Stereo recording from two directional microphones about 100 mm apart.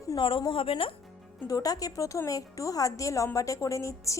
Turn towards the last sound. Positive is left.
turn(degrees=30)  # may be behind; listen again after turning